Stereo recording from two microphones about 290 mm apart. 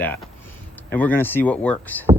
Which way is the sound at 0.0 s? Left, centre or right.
Centre.